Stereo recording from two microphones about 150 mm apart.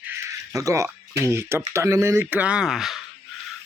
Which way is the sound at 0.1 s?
20° right (ahead or behind).